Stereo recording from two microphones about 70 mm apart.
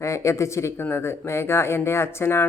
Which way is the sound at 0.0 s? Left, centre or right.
Left.